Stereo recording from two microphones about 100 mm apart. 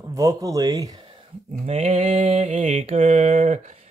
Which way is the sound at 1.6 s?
80° right.